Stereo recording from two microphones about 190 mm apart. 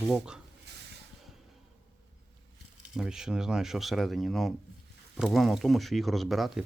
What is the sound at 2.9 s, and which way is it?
Speech, 5° right (ahead or behind).